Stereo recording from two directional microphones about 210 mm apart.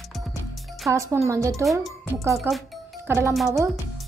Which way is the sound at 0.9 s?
15° right (ahead or behind).